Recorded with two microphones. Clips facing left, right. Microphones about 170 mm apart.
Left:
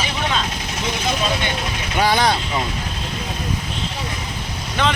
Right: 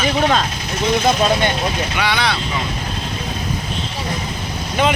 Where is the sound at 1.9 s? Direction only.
45° left (ahead or behind).